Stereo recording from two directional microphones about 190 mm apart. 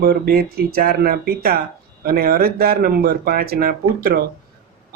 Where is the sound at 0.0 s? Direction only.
50° right (ahead or behind).